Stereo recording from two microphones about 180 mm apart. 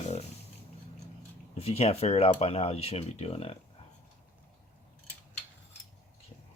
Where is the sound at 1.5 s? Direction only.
35° left (ahead or behind).